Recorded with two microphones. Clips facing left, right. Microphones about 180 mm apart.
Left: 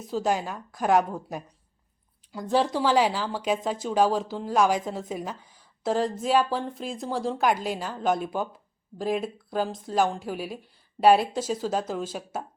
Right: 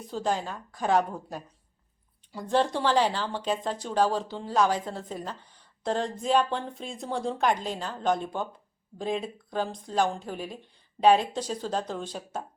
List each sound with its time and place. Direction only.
0.1 s speech: 10° left (ahead or behind)